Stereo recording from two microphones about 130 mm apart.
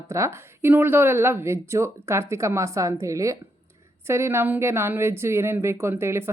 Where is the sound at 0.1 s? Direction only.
20° right (ahead or behind).